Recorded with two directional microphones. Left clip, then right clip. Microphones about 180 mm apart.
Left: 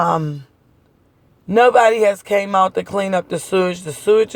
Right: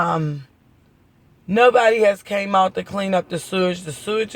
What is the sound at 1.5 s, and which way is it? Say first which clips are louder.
Speech: left 2 dB; 40° left (ahead or behind).